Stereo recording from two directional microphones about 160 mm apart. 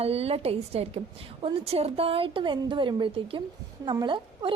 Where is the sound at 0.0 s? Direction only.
40° right (ahead or behind).